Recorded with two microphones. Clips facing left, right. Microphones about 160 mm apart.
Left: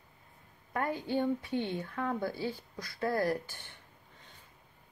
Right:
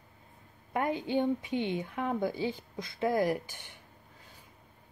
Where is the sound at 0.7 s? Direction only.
20° right (ahead or behind).